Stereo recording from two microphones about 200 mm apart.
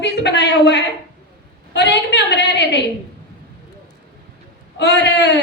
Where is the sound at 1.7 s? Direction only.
60° left (ahead or behind).